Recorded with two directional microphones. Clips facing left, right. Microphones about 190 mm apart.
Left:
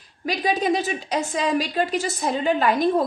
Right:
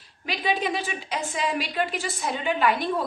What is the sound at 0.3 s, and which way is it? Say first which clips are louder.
A woman's voice: left 5 dB; 40° left (ahead or behind).